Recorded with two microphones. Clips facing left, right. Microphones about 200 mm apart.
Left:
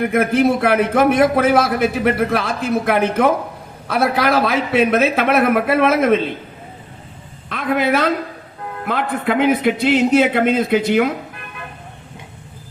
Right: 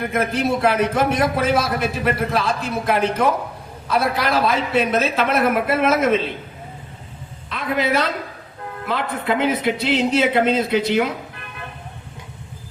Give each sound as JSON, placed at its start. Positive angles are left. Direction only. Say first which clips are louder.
{"t": 0.1, "sound": "a man's voice", "louder": "left 4 dB", "side_deg": 55}
{"t": 7.5, "sound": "a woman's voice", "louder": "left 3 dB", "side_deg": 50}